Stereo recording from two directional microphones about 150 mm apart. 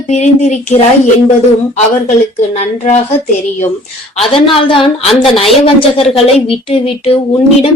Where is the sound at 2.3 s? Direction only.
50° left (ahead or behind).